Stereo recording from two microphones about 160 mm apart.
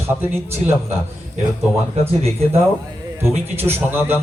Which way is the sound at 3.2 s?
15° right (ahead or behind).